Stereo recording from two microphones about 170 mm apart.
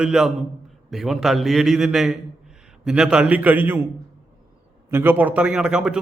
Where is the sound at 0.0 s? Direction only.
5° right (ahead or behind).